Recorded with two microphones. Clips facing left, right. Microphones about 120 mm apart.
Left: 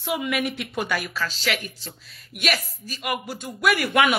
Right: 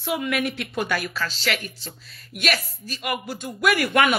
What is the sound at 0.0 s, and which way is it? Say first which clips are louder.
Speech: right 1 dB; 10° left (ahead or behind).